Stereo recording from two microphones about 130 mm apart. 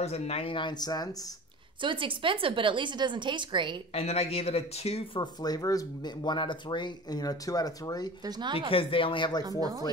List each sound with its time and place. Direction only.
0.0 s speech: 50° left (ahead or behind); by 1.1 s 30° left (ahead or behind)
1.8 s speech: 40° right (ahead or behind)
3.9 s speech: 50° left (ahead or behind)
5.2 s speech: 30° left (ahead or behind)
8.2 s speech: 35° right (ahead or behind)
8.5 s speech: 45° left (ahead or behind)